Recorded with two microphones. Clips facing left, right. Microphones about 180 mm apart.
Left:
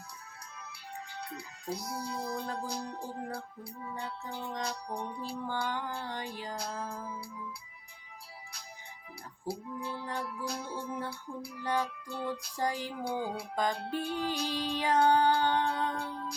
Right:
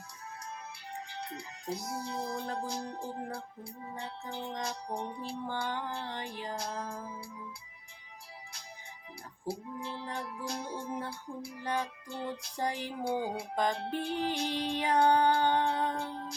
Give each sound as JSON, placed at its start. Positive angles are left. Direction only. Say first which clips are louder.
{"t": 0.4, "sound": "music", "louder": "right 3 dB", "side_deg": -25}
{"t": 9.5, "sound": "music", "louder": "left 1 dB", "side_deg": -25}